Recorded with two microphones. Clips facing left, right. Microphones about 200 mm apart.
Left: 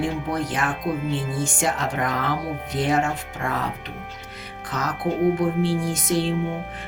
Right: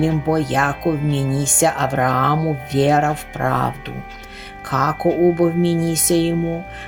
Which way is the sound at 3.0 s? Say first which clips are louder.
Right 5 dB; 50° right (ahead or behind).